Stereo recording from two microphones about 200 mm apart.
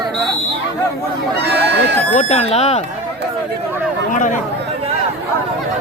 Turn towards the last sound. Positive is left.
turn(degrees=40)  # may be behind; listen again after turning